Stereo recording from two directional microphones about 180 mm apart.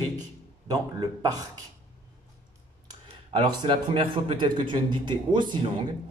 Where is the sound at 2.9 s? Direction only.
25° right (ahead or behind).